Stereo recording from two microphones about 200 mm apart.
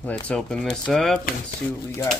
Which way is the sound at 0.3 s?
5° left (ahead or behind).